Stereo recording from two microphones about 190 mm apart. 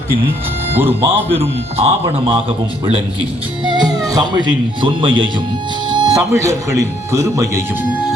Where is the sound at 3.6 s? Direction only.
25° right (ahead or behind).